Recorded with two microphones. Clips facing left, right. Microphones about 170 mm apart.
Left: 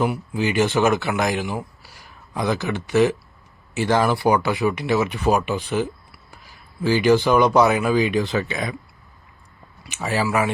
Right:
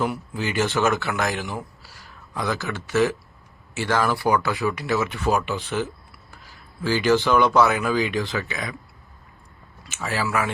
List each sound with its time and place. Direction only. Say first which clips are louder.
0.0 s speech: left 4 dB; 15° left (ahead or behind)
9.8 s speech: left 4 dB; 15° left (ahead or behind)